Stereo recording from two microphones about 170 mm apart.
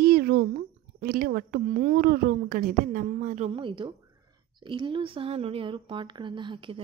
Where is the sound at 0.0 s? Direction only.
70° right (ahead or behind).